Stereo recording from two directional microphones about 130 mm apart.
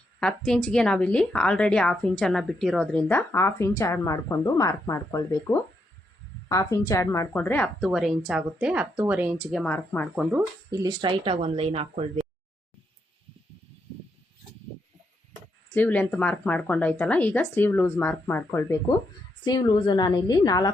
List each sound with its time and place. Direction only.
0.2 s a woman's voice: 5° left (ahead or behind)
3.1 s a woman's voice: 15° left (ahead or behind)
6.5 s a woman's voice: 25° left (ahead or behind)
7.8 s speech: centre (ahead or behind)
9.6 s speech: 10° left (ahead or behind)
10.7 s speech: 35° right (ahead or behind); by 12.2 s 50° right (ahead or behind)
15.7 s speech: 10° left (ahead or behind)
19.5 s a woman's voice: 35° left (ahead or behind)